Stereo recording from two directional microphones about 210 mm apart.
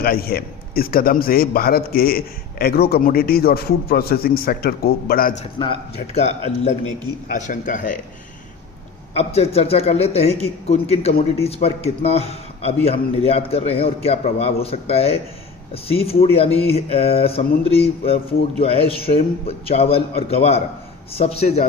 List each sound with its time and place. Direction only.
0.0 s a man's voice: 45° left (ahead or behind)
5.6 s a man's voice: 25° left (ahead or behind)
9.1 s a man's voice: 30° left (ahead or behind)